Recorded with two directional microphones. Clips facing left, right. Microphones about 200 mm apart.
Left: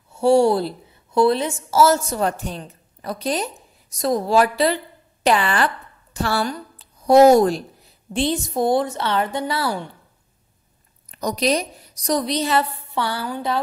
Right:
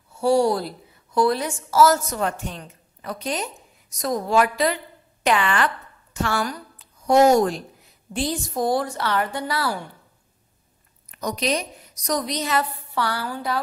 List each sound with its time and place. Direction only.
0.1 s a woman's voice: 25° left (ahead or behind)
11.1 s a woman's voice: 35° left (ahead or behind)